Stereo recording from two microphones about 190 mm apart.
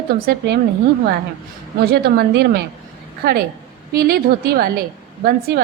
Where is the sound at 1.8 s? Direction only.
55° right (ahead or behind).